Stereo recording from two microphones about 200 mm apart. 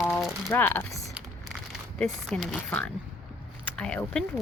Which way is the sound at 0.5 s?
10° left (ahead or behind).